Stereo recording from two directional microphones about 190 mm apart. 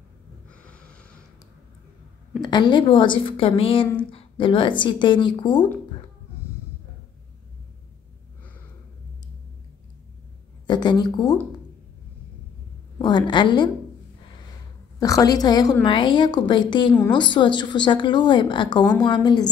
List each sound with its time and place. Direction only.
0.5 s snort: 5° left (ahead or behind)
2.4 s a woman's voice: 25° left (ahead or behind)
10.7 s speech: 25° left (ahead or behind)
13.0 s a woman's voice: 25° left (ahead or behind)
15.0 s a woman's voice: 20° left (ahead or behind)